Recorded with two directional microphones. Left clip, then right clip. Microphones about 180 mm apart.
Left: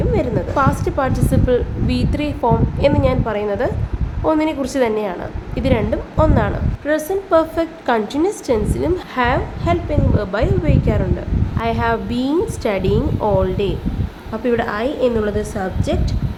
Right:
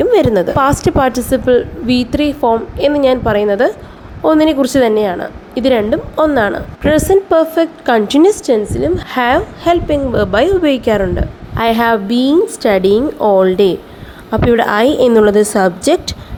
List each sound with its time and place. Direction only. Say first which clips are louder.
0.1 s a woman's voice: right 9 dB; 40° right (ahead or behind)
8.4 s speech: right 5 dB; 20° right (ahead or behind)
9.1 s a woman's voice: right 7 dB; 35° right (ahead or behind); by 16.1 s 50° right (ahead or behind)